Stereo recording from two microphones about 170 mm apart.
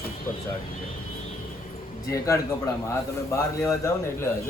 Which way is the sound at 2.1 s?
20° left (ahead or behind).